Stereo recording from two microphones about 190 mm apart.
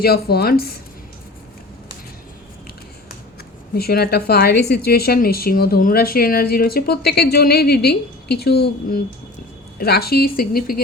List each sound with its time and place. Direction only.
0.0 s a woman's voice: 55° left (ahead or behind)
3.8 s a woman's voice: 55° left (ahead or behind)